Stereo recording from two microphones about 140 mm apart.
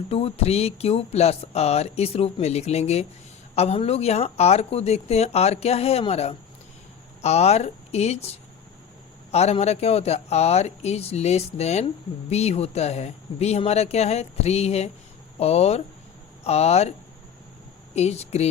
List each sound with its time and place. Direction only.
0.1 s speech: 45° left (ahead or behind)
9.3 s speech: 50° left (ahead or behind)
17.9 s speech: 50° left (ahead or behind)